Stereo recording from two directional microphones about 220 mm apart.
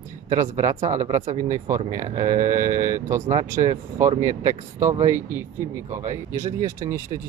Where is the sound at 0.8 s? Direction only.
30° right (ahead or behind).